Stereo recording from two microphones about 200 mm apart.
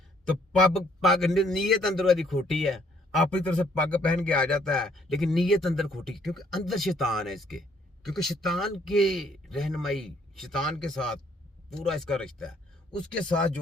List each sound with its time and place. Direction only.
0.7 s a man's voice: centre (ahead or behind)